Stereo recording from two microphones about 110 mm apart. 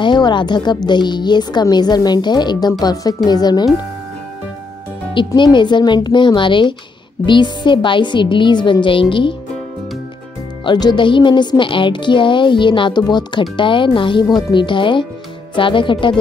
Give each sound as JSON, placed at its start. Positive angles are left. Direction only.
{"t": 0.0, "sound": "a woman's voice", "side_deg": 45}
{"t": 5.1, "sound": "a woman's voice", "side_deg": 45}
{"t": 10.6, "sound": "a woman's voice", "side_deg": 40}